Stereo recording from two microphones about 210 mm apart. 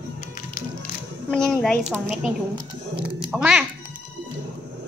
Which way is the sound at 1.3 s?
5° left (ahead or behind).